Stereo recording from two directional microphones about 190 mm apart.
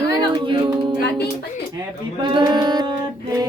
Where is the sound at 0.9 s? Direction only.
60° left (ahead or behind).